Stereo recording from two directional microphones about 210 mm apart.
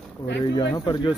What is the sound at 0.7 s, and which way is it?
Speech, 20° left (ahead or behind).